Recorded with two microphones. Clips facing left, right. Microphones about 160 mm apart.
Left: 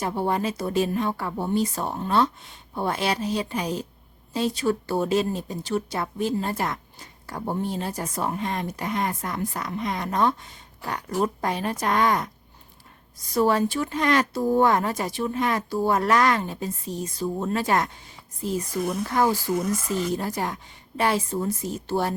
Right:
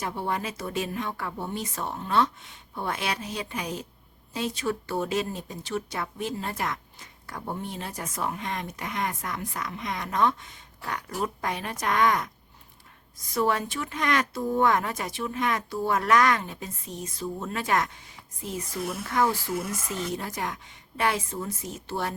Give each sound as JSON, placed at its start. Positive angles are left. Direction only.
{"t": 0.0, "sound": "speech", "side_deg": 35}
{"t": 13.3, "sound": "speech", "side_deg": 35}
{"t": 19.0, "sound": "speech", "side_deg": 35}
{"t": 19.5, "sound": "speech", "side_deg": -5}
{"t": 20.1, "sound": "speech", "side_deg": 35}